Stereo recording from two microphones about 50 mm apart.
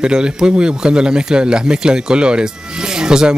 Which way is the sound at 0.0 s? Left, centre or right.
Centre.